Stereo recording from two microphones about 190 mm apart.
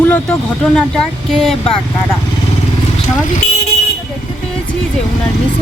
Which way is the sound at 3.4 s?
40° left (ahead or behind).